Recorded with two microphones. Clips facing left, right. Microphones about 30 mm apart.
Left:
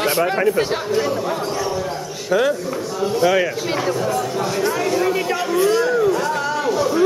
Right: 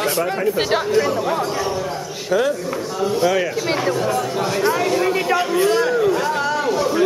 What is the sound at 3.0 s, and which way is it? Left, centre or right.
Speech, centre.